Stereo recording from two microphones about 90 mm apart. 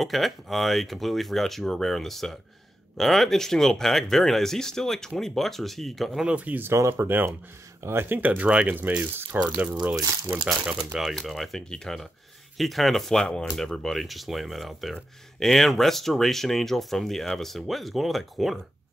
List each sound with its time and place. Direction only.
0.0 s speech: centre (ahead or behind)
6.2 s speech: 15° right (ahead or behind)
6.8 s speech: 35° right (ahead or behind)
7.1 s speech: 20° right (ahead or behind); by 18.6 s centre (ahead or behind)